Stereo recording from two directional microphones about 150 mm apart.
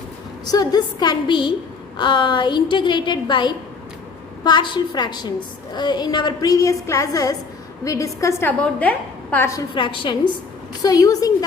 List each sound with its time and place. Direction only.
0.4 s a woman's voice: 25° left (ahead or behind)
9.6 s a woman's voice: 30° left (ahead or behind)